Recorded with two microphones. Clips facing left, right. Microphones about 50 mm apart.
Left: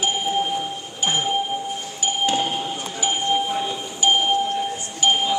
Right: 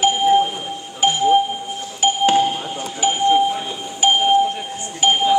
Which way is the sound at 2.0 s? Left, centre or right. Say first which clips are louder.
Right 7 dB; right.